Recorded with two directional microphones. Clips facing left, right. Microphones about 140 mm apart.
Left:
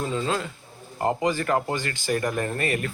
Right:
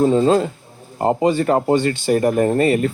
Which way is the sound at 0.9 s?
25° right (ahead or behind).